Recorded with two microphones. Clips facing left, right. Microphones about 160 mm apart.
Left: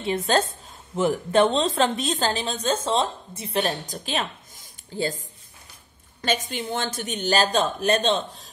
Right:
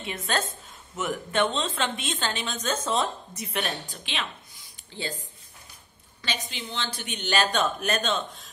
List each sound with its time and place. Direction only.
0.0 s a woman's voice: 30° left (ahead or behind)
6.2 s a woman's voice: 50° left (ahead or behind); by 8.5 s 30° left (ahead or behind)